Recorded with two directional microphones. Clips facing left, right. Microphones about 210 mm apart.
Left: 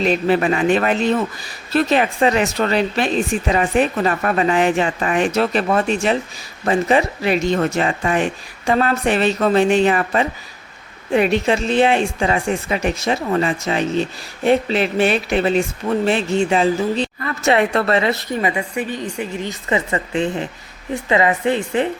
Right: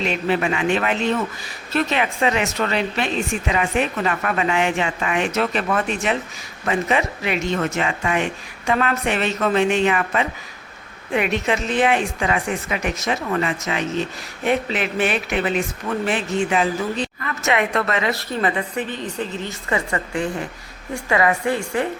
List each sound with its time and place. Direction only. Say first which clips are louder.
0.0 s a woman's voice: left 5 dB; 40° left (ahead or behind); by 21.8 s 20° left (ahead or behind)